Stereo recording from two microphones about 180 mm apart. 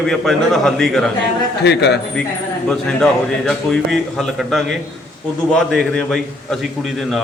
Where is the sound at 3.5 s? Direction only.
Centre (ahead or behind).